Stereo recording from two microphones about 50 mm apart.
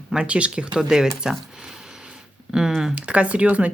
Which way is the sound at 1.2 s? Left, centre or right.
Centre.